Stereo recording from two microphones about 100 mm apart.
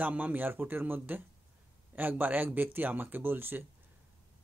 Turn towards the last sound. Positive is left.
turn(degrees=-20)  # may be behind; listen again after turning